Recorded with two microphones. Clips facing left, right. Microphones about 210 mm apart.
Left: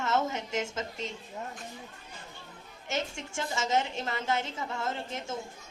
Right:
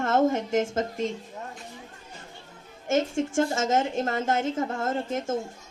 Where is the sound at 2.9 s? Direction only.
50° right (ahead or behind).